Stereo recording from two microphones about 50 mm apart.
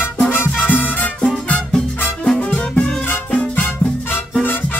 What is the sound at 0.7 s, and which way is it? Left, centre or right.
Music, left.